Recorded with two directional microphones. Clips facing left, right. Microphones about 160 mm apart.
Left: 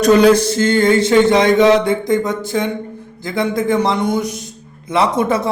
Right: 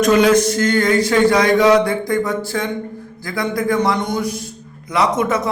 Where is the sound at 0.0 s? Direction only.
35° left (ahead or behind).